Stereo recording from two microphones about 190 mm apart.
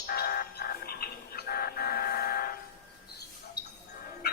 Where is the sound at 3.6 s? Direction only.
60° left (ahead or behind).